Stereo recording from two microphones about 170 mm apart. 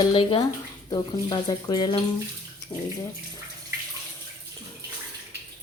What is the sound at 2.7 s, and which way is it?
Speech, 15° left (ahead or behind).